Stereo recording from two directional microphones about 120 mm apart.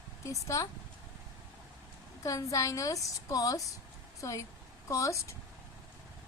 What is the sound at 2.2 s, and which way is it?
A woman's voice, 25° left (ahead or behind).